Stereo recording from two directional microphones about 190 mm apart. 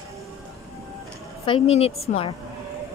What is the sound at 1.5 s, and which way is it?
Speech, 30° left (ahead or behind).